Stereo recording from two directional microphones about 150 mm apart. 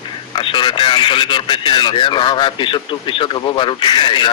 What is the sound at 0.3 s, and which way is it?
A man's voice, 30° left (ahead or behind).